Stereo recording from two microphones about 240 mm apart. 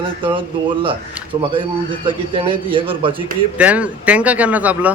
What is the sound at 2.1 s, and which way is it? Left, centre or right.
A man's voice, right.